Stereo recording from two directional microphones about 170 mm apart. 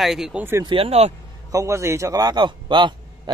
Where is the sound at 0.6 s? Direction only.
35° right (ahead or behind).